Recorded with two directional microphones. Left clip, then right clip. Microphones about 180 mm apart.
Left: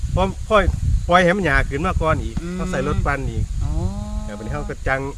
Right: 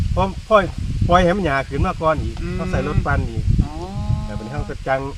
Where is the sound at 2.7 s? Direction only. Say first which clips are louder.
Even; 20° left (ahead or behind).